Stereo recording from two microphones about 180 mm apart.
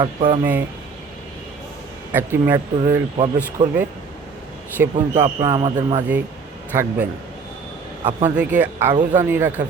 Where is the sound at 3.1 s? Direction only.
30° right (ahead or behind).